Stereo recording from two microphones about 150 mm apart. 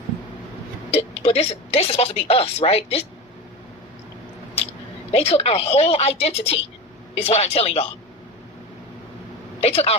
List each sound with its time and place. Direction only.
0.9 s a woman's voice: 40° left (ahead or behind)
5.1 s a woman's voice: 45° left (ahead or behind)
9.6 s speech: 45° left (ahead or behind)